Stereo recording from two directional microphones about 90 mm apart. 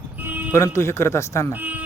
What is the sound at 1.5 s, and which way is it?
Speech, 20° right (ahead or behind).